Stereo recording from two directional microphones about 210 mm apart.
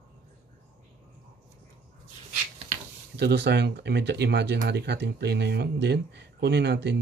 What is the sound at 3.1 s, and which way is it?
Speech, 55° right (ahead or behind).